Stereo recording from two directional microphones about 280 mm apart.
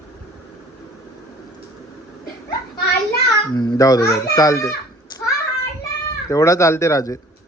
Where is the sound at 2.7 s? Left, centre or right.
Left.